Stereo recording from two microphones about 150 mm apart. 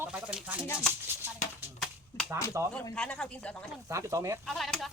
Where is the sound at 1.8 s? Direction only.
Centre (ahead or behind).